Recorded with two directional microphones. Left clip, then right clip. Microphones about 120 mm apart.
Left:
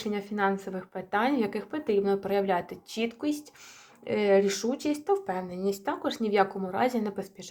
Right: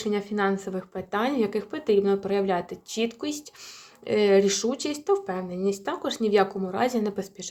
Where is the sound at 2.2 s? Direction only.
20° right (ahead or behind).